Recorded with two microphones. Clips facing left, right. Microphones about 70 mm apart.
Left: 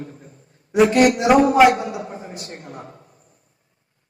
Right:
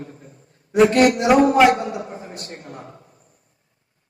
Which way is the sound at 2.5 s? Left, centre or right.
Left.